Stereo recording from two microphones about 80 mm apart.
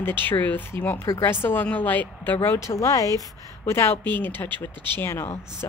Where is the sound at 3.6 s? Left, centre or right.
Left.